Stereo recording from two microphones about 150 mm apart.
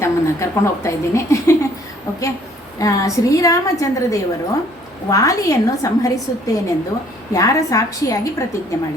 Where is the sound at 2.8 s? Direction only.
20° left (ahead or behind).